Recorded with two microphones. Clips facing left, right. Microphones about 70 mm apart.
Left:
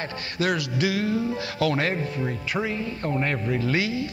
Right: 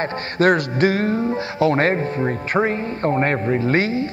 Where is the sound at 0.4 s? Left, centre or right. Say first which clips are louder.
Right 8 dB; right.